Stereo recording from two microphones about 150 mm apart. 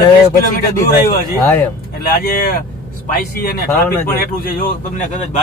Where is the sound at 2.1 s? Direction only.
90° left.